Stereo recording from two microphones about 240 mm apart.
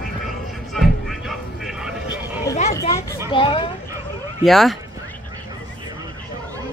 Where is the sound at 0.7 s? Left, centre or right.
Centre.